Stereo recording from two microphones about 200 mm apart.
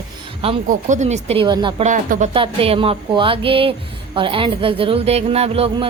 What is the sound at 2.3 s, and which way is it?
Speech, 25° right (ahead or behind).